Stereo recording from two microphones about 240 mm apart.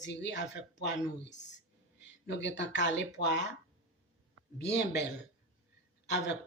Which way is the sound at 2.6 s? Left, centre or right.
Left.